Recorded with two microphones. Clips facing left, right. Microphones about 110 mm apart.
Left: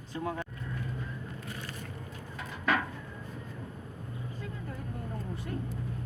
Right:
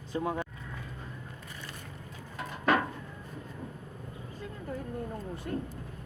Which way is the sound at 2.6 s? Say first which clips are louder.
Right 3 dB; 30° right (ahead or behind).